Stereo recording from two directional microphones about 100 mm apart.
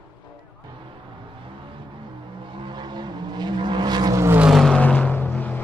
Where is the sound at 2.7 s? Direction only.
45° right (ahead or behind).